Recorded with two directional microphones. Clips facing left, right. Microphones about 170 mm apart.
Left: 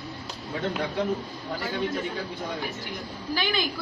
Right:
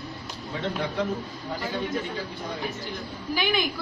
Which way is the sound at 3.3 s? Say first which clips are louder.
Right 2 dB; 15° right (ahead or behind).